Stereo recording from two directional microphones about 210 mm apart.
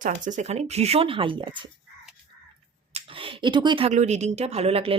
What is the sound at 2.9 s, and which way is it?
A woman's voice, 25° right (ahead or behind).